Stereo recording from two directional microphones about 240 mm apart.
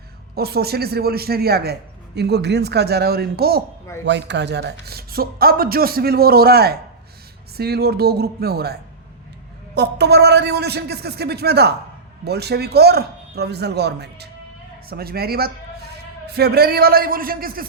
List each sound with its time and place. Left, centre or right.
0.3 s a man's voice: right